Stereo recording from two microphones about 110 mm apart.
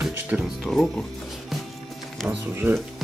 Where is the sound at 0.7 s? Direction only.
10° left (ahead or behind).